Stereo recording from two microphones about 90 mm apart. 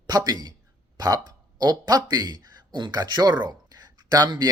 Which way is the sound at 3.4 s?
50° right (ahead or behind).